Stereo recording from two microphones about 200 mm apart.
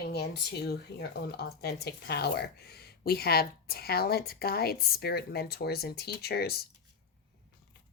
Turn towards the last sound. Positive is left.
turn(degrees=50)  # may be behind; listen again after turning